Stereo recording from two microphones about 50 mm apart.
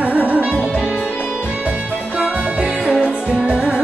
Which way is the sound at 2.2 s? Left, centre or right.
Right.